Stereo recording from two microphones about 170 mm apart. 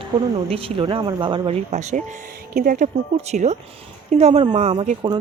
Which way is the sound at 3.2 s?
40° right (ahead or behind).